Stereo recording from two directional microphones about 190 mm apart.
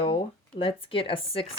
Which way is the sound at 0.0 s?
30° left (ahead or behind).